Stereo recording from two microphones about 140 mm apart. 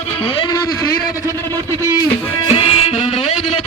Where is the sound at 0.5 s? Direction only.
25° left (ahead or behind).